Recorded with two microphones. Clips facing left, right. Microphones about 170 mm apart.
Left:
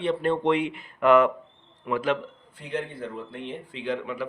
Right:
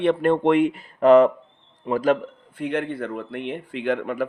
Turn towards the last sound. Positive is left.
turn(degrees=-55)  # may be behind; listen again after turning